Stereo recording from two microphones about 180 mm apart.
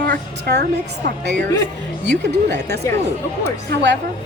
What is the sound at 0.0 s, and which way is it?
A woman's voice, 65° right (ahead or behind).